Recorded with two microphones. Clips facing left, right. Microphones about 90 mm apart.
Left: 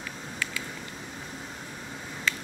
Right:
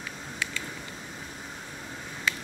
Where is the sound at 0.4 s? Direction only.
20° right (ahead or behind).